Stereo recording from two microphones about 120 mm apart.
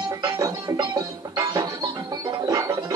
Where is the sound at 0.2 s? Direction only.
35° right (ahead or behind).